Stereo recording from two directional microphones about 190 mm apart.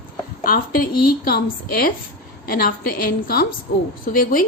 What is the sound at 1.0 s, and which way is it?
A woman's voice, 50° left (ahead or behind).